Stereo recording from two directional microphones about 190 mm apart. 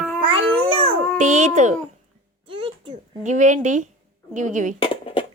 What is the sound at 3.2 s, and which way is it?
A woman's voice, 40° right (ahead or behind).